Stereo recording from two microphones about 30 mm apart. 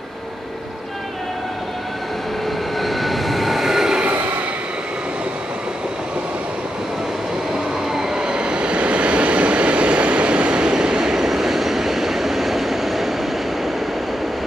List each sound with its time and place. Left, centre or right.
2.8 s vehicle: centre
7.9 s train: centre